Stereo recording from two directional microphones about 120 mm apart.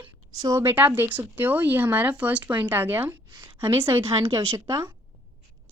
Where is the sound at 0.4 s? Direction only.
20° right (ahead or behind).